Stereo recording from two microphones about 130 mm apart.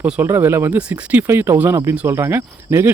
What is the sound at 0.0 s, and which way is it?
Speech, 15° right (ahead or behind).